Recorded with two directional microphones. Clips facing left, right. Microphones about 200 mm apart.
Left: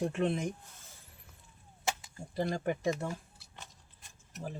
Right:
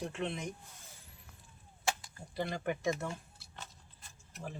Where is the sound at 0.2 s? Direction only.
45° left (ahead or behind).